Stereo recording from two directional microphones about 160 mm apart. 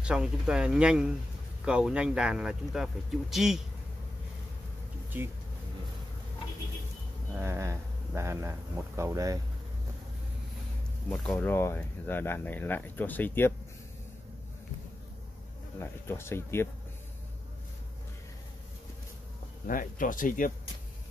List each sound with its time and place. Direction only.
0.0 s speech: 5° right (ahead or behind)
7.3 s speech: 15° right (ahead or behind)
11.1 s speech: 10° left (ahead or behind)
15.8 s speech: 15° left (ahead or behind)
19.7 s speech: 55° left (ahead or behind)